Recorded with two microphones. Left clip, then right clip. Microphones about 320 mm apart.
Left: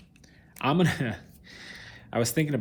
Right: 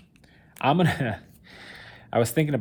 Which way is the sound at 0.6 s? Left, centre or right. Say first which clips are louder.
Right 3 dB; right.